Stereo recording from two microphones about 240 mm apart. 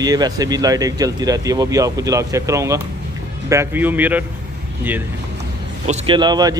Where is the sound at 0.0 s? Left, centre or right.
Centre.